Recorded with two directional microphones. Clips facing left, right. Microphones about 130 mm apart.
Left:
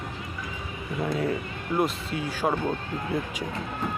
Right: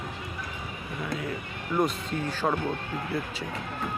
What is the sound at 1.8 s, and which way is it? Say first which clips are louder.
Speech: even; 10° left (ahead or behind).